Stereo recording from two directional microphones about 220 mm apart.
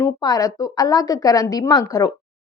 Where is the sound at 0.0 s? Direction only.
15° left (ahead or behind).